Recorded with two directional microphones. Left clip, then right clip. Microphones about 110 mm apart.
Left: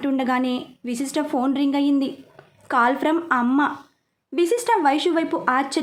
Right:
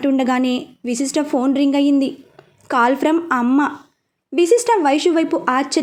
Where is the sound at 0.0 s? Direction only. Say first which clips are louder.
Right 5 dB; 35° right (ahead or behind).